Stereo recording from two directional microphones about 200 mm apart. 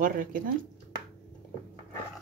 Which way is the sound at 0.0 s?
45° right (ahead or behind).